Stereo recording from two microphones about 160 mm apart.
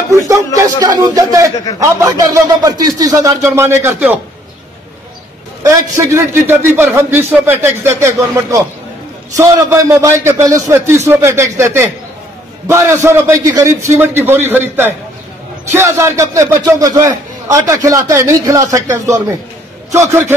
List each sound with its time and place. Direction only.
0.6 s speech: 20° right (ahead or behind)
5.6 s a man's voice: 20° right (ahead or behind)